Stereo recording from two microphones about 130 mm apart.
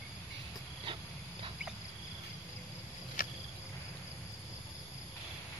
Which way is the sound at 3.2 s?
90° left.